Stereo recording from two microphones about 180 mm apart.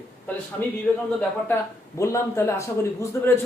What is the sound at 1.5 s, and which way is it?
A man's voice, 15° left (ahead or behind).